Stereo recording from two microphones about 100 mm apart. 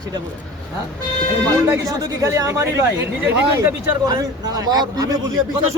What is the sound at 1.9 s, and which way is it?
Speech, 30° right (ahead or behind).